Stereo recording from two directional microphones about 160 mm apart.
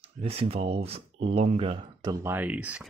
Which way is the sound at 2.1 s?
15° right (ahead or behind).